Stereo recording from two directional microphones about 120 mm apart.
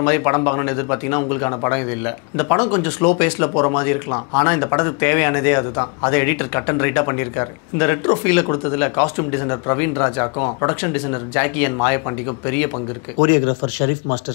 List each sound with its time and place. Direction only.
0.0 s a man's voice: 20° left (ahead or behind)